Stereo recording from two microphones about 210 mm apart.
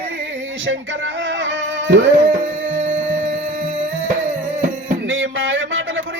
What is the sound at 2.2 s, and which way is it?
Tabla, 40° right (ahead or behind).